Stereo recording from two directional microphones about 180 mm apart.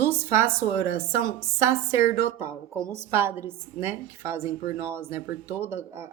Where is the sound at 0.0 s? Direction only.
15° right (ahead or behind).